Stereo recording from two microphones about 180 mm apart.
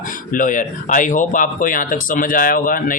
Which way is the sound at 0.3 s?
45° left (ahead or behind).